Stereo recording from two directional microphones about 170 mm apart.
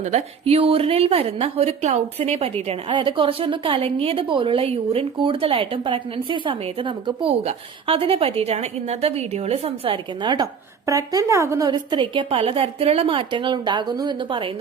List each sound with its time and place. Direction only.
0.0 s a woman's voice: 40° right (ahead or behind)